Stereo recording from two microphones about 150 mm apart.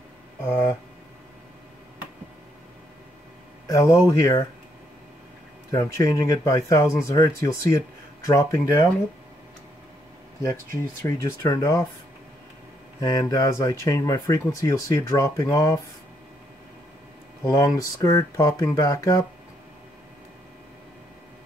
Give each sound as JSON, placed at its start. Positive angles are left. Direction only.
{"t": 3.6, "sound": "speech", "side_deg": 20}
{"t": 5.7, "sound": "speech", "side_deg": 20}
{"t": 10.4, "sound": "speech", "side_deg": 20}
{"t": 13.0, "sound": "speech", "side_deg": 20}
{"t": 17.6, "sound": "speech", "side_deg": 20}